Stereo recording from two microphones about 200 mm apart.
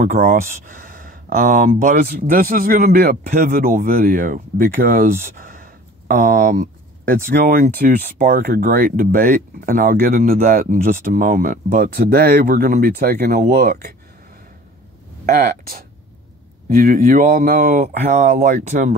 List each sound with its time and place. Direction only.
0.0 s speech: 45° right (ahead or behind)
16.6 s speech: 45° right (ahead or behind)